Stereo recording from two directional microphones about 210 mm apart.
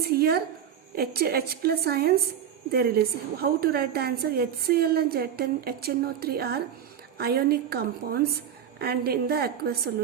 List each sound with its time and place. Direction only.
0.1 s a woman's voice: 50° right (ahead or behind)